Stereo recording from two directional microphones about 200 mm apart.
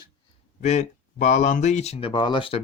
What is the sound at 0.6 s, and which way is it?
Speech, 35° left (ahead or behind).